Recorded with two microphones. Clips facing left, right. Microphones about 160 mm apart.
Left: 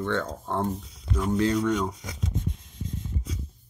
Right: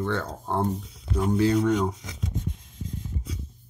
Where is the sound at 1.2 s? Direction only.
30° right (ahead or behind).